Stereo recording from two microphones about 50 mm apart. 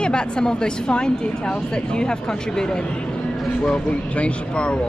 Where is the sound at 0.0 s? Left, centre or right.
Centre.